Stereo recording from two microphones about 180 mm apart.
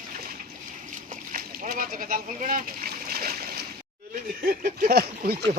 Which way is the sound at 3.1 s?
55° right (ahead or behind).